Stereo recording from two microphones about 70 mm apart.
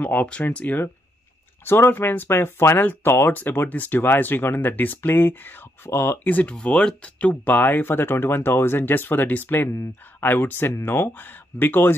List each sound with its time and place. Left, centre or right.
0.0 s speech: centre
1.6 s speech: left
6.1 s speech: left
6.5 s speech: centre; by 11.9 s left